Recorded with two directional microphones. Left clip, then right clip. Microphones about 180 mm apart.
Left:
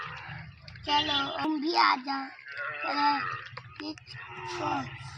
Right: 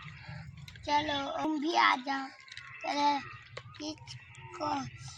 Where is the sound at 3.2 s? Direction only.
30° left (ahead or behind).